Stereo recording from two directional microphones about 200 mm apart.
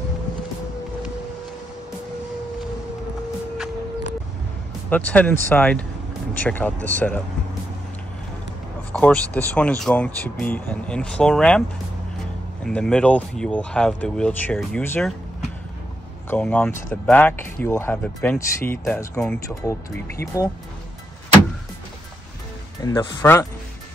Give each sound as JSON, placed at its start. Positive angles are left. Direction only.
{"t": 4.8, "sound": "speech", "side_deg": 5}
{"t": 8.9, "sound": "speech", "side_deg": 5}
{"t": 12.6, "sound": "speech", "side_deg": 0}
{"t": 16.3, "sound": "speech", "side_deg": 5}
{"t": 22.8, "sound": "speech", "side_deg": 15}